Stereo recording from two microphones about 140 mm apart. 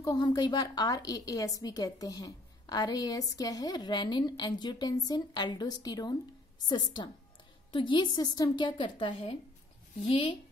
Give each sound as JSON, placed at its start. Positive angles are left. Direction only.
{"t": 0.0, "sound": "a woman's voice", "side_deg": 25}